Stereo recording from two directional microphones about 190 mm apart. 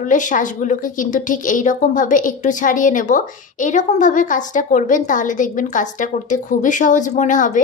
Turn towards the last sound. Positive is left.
turn(degrees=40)  # may be behind; listen again after turning